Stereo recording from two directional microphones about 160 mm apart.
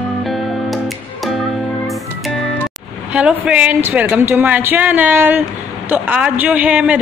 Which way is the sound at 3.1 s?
5° right (ahead or behind).